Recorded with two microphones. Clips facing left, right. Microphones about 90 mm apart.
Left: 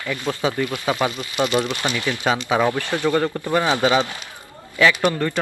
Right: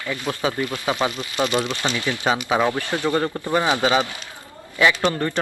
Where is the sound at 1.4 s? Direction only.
Centre (ahead or behind).